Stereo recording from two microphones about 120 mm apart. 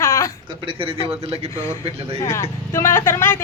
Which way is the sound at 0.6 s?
50° right (ahead or behind).